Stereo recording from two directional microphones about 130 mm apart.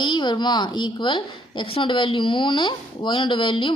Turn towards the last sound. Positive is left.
turn(degrees=40)  # may be behind; listen again after turning